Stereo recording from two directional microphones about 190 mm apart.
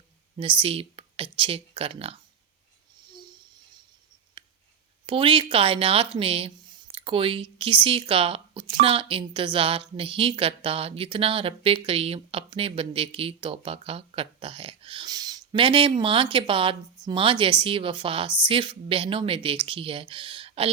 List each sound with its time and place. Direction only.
0.3 s speech: 30° right (ahead or behind)
4.4 s a sound: 25° right (ahead or behind)
5.0 s a woman's voice: 30° right (ahead or behind)